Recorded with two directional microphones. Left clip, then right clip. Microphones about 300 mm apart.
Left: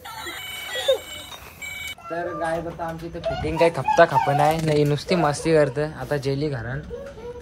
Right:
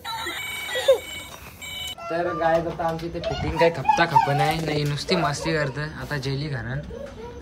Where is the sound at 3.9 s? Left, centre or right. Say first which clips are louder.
Left 2 dB; centre.